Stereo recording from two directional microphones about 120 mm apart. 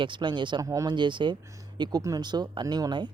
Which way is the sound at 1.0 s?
40° right (ahead or behind).